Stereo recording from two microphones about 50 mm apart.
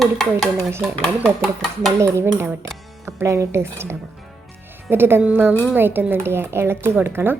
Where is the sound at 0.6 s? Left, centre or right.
Right.